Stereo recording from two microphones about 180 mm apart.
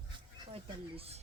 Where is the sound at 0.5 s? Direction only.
35° right (ahead or behind).